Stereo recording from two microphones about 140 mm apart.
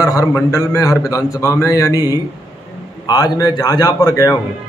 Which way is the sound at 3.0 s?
30° left (ahead or behind).